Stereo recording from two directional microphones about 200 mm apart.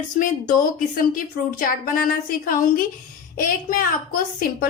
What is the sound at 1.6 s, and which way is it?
A child's voice, 45° left (ahead or behind).